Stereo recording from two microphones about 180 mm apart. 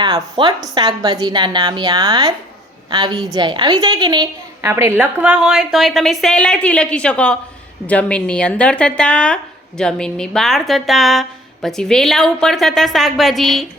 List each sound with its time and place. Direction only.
0.0 s a woman's voice: 25° right (ahead or behind); by 13.7 s centre (ahead or behind)